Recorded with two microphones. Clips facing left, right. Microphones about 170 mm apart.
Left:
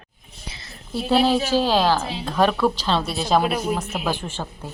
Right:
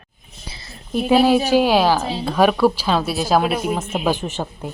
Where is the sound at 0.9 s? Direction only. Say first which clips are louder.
Right 4 dB; 15° right (ahead or behind).